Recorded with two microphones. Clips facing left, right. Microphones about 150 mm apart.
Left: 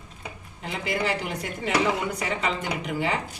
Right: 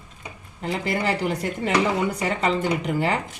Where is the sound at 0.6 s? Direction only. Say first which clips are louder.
Right 3 dB; 40° right (ahead or behind).